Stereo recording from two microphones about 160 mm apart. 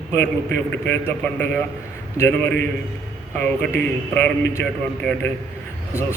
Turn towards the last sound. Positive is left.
turn(degrees=15)  # may be behind; listen again after turning